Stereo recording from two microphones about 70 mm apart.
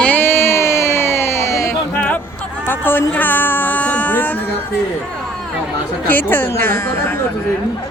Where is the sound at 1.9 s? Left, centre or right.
Left.